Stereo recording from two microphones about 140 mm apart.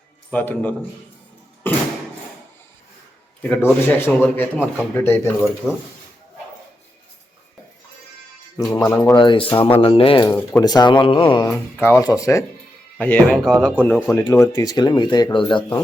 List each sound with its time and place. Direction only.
0.3 s speech: 10° left (ahead or behind)
1.6 s a sound: 15° left (ahead or behind)
3.5 s speech: 15° left (ahead or behind)
5.6 s speech: centre (ahead or behind)
8.7 s speech: 25° left (ahead or behind)
9.1 s speech: 35° left (ahead or behind)
10.2 s speech: 15° left (ahead or behind)
10.6 s speech: 30° left (ahead or behind)
11.5 s speech: 20° left (ahead or behind)
13.0 s speech: 10° left (ahead or behind)
14.4 s speech: 25° left (ahead or behind)